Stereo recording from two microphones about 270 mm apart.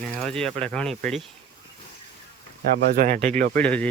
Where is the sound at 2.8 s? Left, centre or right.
Right.